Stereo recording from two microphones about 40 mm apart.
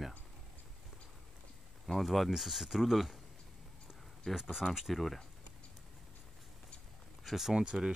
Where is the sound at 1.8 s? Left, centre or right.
Centre.